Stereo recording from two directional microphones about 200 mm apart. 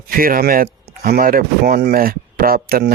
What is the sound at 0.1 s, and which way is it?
Speech, 45° right (ahead or behind).